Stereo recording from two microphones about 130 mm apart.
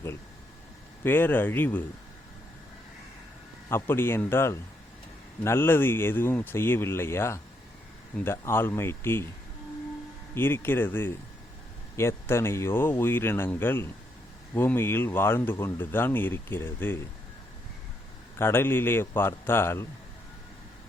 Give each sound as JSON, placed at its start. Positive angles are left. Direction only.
{"t": 1.0, "sound": "speech", "side_deg": 15}
{"t": 3.7, "sound": "speech", "side_deg": 20}
{"t": 10.3, "sound": "speech", "side_deg": 15}
{"t": 18.3, "sound": "speech", "side_deg": 15}